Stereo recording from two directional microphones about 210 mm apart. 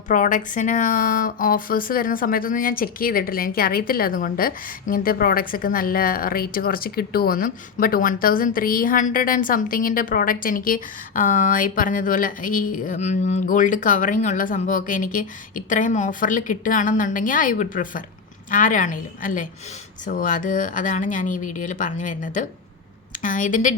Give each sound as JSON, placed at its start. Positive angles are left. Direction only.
{"t": 0.1, "sound": "speech", "side_deg": 40}